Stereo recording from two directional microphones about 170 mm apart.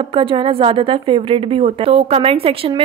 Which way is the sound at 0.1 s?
30° right (ahead or behind).